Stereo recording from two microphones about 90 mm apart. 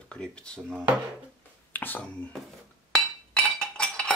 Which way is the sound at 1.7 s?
20° left (ahead or behind).